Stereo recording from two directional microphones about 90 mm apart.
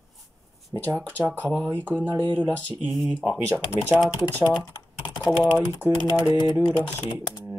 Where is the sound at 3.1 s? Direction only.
15° right (ahead or behind).